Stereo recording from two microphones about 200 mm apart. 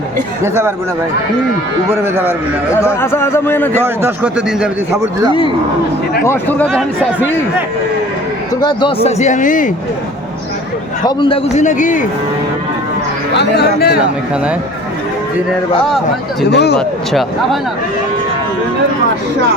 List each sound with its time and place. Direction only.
0.4 s speech: 10° right (ahead or behind)
1.9 s speech: 10° right (ahead or behind)
3.0 s a man's voice: 10° left (ahead or behind)
4.0 s speech: 5° right (ahead or behind)
6.2 s a man's voice: 10° left (ahead or behind)
8.6 s a man's voice: 25° left (ahead or behind)
11.0 s a man's voice: 25° left (ahead or behind)
11.5 s a man's voice: 40° left (ahead or behind)
13.3 s speech: 55° left (ahead or behind)
16.5 s speech: 55° left (ahead or behind)
16.7 s speech: centre (ahead or behind)